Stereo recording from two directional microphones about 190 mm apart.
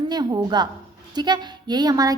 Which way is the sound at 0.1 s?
20° right (ahead or behind).